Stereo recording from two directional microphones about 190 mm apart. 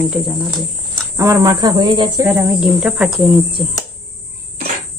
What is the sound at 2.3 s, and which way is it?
Speech, 5° right (ahead or behind).